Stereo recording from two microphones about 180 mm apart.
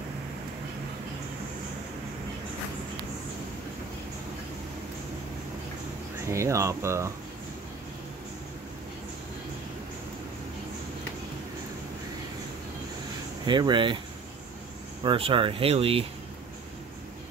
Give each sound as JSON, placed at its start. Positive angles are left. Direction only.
{"t": 6.2, "sound": "speech", "side_deg": -15}
{"t": 13.5, "sound": "speech", "side_deg": -25}
{"t": 15.0, "sound": "speech", "side_deg": -30}